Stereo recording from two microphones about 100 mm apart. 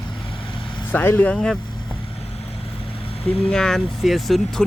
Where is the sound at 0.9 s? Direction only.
20° left (ahead or behind).